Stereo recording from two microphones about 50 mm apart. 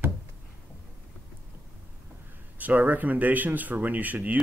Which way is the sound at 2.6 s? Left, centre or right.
Right.